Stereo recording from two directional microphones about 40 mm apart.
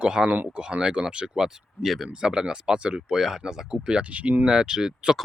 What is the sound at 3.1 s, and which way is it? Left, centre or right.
Speech, centre.